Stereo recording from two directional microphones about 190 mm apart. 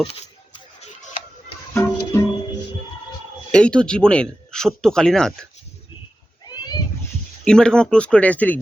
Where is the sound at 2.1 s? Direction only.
15° left (ahead or behind).